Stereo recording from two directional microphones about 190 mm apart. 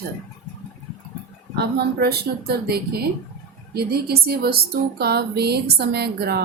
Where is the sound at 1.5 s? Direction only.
60° right (ahead or behind).